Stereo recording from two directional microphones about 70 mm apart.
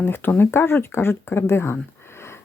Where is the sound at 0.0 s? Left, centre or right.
Left.